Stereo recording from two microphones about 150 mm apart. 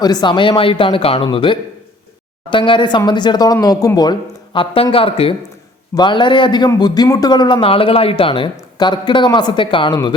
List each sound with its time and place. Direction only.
0.0 s a man's voice: 25° left (ahead or behind)